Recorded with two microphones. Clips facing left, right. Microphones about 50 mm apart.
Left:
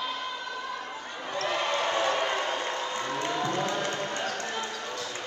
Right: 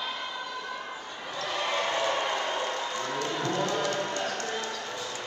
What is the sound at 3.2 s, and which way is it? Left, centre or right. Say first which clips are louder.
Music: left 1 dB; centre.